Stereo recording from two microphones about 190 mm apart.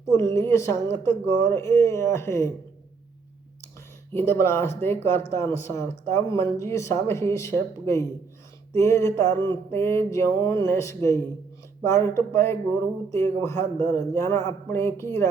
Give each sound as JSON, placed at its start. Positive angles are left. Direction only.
{"t": 0.1, "sound": "speech", "side_deg": 15}
{"t": 4.1, "sound": "speech", "side_deg": 15}